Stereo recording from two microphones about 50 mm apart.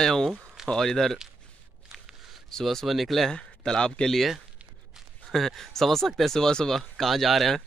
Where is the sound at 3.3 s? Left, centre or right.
Centre.